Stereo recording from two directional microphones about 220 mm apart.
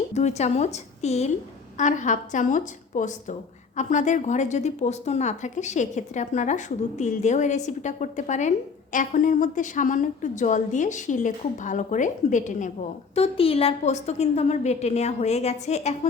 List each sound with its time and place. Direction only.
0.1 s a woman's voice: 30° left (ahead or behind)